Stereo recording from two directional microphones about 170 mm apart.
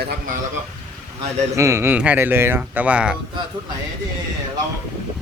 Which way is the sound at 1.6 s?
15° right (ahead or behind).